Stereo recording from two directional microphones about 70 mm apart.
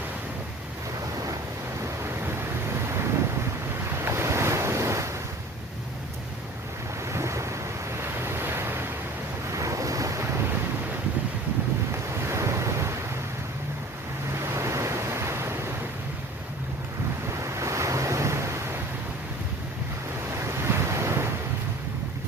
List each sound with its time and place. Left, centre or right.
2.2 s vehicle: right
3.9 s waves: right
7.0 s waves: right
9.5 s waves: right
12.0 s waves: right
14.4 s waves: right
17.4 s waves: right
20.5 s waves: right